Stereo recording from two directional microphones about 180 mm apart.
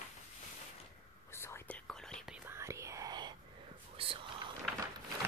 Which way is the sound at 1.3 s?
15° left (ahead or behind).